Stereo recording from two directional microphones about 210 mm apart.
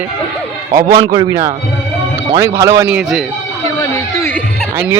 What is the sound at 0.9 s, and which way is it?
A man's voice, 20° right (ahead or behind).